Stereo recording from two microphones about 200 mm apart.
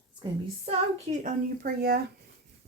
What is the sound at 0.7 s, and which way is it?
Speech, 30° right (ahead or behind).